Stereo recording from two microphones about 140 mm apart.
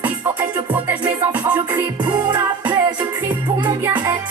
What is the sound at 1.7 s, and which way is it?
Music, 35° right (ahead or behind).